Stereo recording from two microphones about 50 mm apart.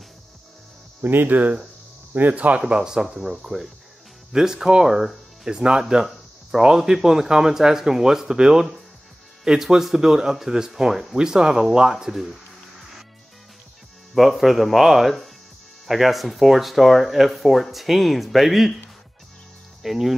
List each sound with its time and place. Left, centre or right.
1.0 s speech: right
2.6 s speech: centre
14.1 s speech: centre
19.8 s speech: centre